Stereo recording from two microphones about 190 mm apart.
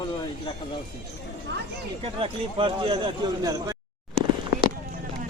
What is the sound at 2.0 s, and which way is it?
A man's voice, 30° right (ahead or behind).